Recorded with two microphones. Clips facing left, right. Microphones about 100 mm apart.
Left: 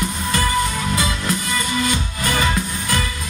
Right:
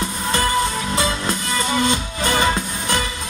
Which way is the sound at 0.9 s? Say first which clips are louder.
Even; 30° right (ahead or behind).